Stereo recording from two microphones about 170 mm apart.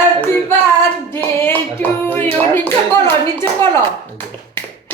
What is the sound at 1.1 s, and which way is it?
Clapping, 15° left (ahead or behind).